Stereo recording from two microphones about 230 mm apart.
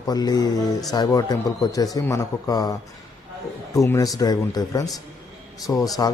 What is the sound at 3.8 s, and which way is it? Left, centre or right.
Speech, centre.